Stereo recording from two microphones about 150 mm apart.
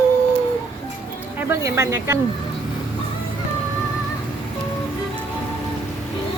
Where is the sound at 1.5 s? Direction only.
20° right (ahead or behind).